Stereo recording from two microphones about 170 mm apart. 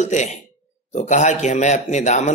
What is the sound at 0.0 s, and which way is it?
A man's voice, 45° left (ahead or behind).